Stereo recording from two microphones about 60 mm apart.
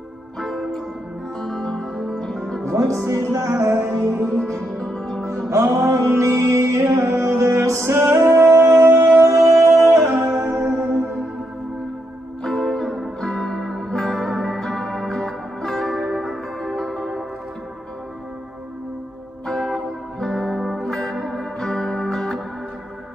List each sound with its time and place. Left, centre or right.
0.4 s music: centre
2.6 s speech: right
3.1 s music: right
4.6 s music: centre
5.5 s music: right
12.4 s music: centre
19.4 s music: centre